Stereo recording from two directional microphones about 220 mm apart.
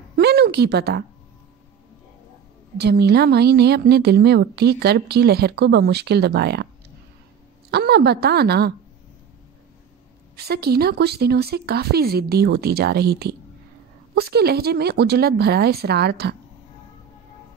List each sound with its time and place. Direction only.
0.2 s a sound: 45° right (ahead or behind)
2.8 s a woman's voice: 50° right (ahead or behind)
7.7 s a woman's voice: 50° right (ahead or behind)
10.3 s a woman's voice: 45° right (ahead or behind)